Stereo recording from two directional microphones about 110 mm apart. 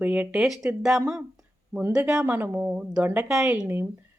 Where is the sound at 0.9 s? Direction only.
30° right (ahead or behind).